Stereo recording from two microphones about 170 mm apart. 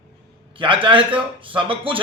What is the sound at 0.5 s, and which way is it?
A man's voice, 30° right (ahead or behind).